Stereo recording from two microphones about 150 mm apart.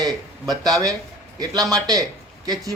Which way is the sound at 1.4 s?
25° right (ahead or behind).